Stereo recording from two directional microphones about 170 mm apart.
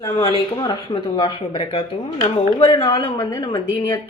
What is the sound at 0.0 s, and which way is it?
Speech, 20° left (ahead or behind).